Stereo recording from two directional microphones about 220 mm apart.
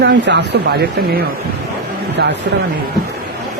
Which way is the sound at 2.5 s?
50° right (ahead or behind).